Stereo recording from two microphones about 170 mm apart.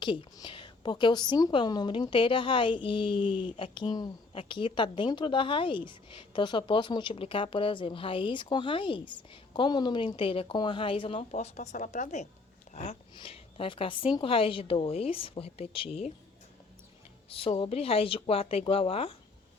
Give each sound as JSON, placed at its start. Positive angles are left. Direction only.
{"t": 0.0, "sound": "a woman's voice", "side_deg": 30}
{"t": 17.2, "sound": "a woman's voice", "side_deg": 35}